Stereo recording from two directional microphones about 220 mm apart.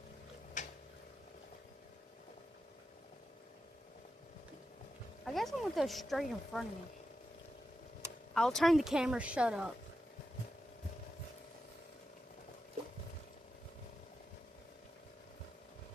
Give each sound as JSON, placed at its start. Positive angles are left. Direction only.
{"t": 0.6, "sound": "a sound", "side_deg": 35}
{"t": 5.2, "sound": "speech", "side_deg": 0}
{"t": 8.3, "sound": "speech", "side_deg": 0}